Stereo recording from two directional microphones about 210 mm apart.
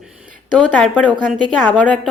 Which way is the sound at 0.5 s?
5° left (ahead or behind).